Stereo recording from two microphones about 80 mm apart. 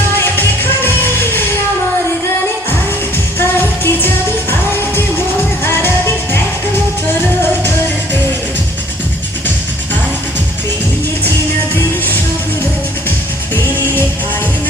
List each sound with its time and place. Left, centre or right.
0.2 s music: left
3.3 s music: left
5.6 s music: left